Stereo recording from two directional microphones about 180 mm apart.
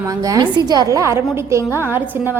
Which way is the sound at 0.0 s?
20° right (ahead or behind).